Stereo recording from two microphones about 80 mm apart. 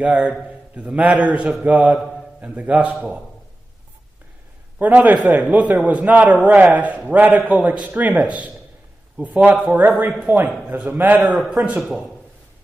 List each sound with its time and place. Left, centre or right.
0.0 s a man's voice: centre
4.7 s a man's voice: right